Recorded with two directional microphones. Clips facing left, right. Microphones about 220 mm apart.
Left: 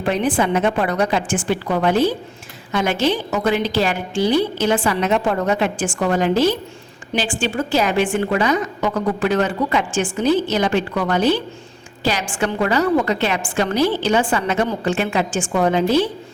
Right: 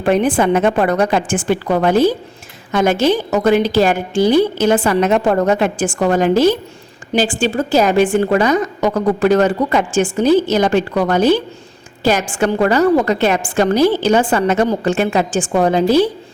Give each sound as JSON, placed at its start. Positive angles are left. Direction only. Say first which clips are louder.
{"t": 0.0, "sound": "a woman's voice", "louder": "right 5 dB", "side_deg": -50}